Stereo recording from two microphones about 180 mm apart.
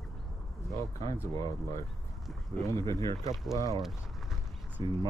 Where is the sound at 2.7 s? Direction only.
15° left (ahead or behind).